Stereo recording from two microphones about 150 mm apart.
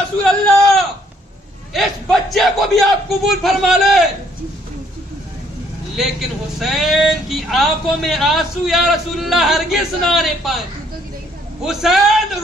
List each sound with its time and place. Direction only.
0.2 s a sound: 5° left (ahead or behind)
1.7 s speech: centre (ahead or behind)
6.6 s speech: centre (ahead or behind)
11.6 s speech: centre (ahead or behind)